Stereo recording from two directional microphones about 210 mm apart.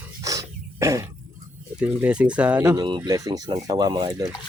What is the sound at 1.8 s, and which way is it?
Speech, 5° right (ahead or behind).